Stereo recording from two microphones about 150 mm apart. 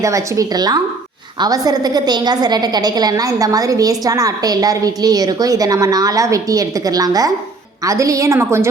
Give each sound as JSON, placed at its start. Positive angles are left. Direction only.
{"t": 0.0, "sound": "a woman's voice", "side_deg": -20}